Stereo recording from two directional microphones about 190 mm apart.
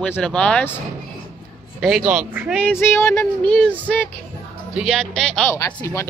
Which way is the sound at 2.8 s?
10° left (ahead or behind).